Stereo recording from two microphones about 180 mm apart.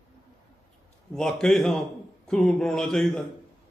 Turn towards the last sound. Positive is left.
turn(degrees=5)  # may be behind; listen again after turning